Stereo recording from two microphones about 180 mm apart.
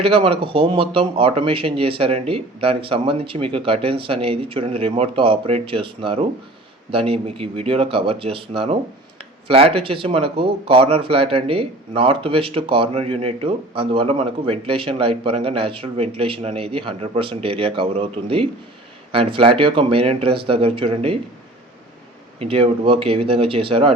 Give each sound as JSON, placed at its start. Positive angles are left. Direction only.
{"t": 0.0, "sound": "speech", "side_deg": -30}
{"t": 22.4, "sound": "speech", "side_deg": -30}